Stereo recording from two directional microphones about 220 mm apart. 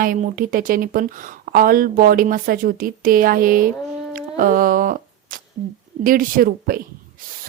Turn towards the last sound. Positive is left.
turn(degrees=-40)  # may be behind; listen again after turning